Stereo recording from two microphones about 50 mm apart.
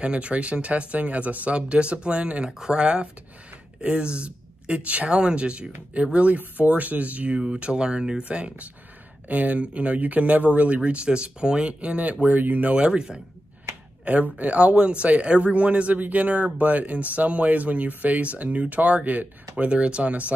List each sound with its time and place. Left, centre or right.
0.0 s speech: right
12.7 s speech: centre
14.0 s speech: right